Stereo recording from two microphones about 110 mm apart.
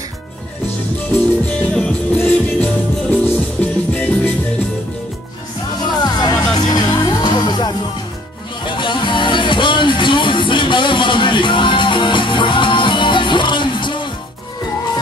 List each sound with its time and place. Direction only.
0.9 s music: 10° left (ahead or behind)
5.9 s music: 40° left (ahead or behind)